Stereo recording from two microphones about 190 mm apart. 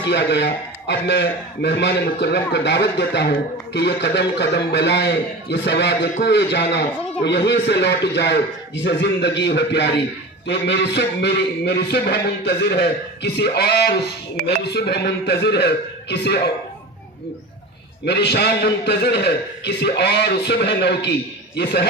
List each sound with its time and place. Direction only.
0.0 s a man's voice: 65° left (ahead or behind)
18.0 s a man's voice: 60° left (ahead or behind)